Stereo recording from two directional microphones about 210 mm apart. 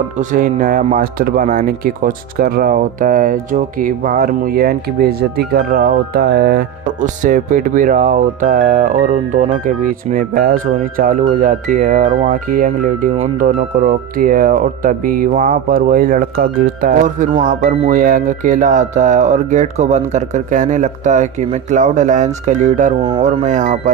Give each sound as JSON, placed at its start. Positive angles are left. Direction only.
{"t": 0.2, "sound": "speech", "side_deg": -40}